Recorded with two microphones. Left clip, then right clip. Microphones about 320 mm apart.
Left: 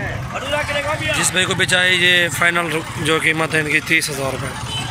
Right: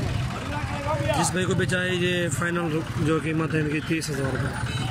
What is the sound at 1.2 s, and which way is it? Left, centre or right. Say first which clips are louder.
Speech: left 8 dB; centre.